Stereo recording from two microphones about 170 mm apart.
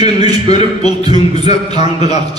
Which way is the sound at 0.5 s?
40° left (ahead or behind).